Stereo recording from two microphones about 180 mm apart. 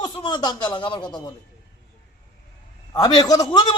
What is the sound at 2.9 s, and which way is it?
Speech, 25° left (ahead or behind).